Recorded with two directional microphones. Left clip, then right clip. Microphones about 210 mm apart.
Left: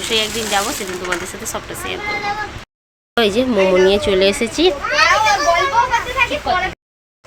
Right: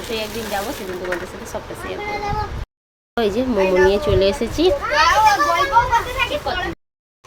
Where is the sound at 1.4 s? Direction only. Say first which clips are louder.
Left 3 dB; 5° left (ahead or behind).